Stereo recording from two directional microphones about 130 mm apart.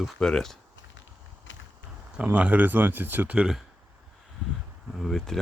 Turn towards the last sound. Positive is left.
turn(degrees=5)  # may be behind; listen again after turning